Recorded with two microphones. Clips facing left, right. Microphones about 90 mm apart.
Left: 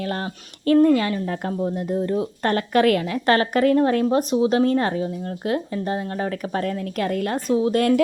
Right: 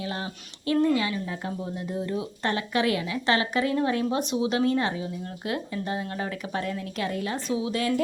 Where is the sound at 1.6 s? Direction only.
40° left (ahead or behind).